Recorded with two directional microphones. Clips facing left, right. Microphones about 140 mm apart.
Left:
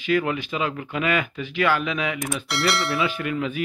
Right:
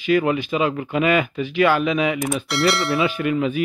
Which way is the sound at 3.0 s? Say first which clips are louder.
Right 5 dB; 20° right (ahead or behind).